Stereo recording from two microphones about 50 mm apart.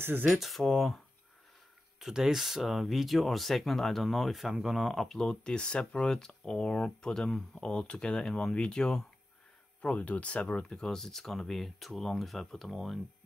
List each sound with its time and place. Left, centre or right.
0.0 s speech: right
0.3 s speech: centre
2.0 s speech: centre
7.8 s speech: centre
9.9 s speech: left; by 13.0 s centre